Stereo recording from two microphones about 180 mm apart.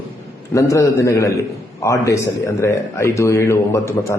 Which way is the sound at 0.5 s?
15° left (ahead or behind).